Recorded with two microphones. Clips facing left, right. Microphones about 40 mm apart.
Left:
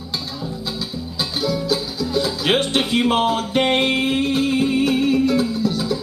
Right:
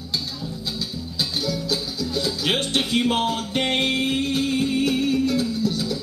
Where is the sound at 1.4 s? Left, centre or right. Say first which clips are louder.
Left 8 dB; centre.